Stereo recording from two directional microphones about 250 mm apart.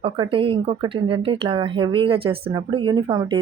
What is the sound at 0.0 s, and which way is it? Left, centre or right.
Speech, right.